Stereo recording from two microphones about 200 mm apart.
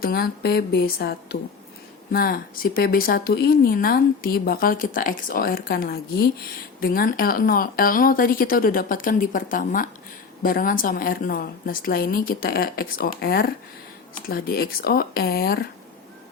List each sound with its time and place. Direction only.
0.0 s speech: 50° left (ahead or behind)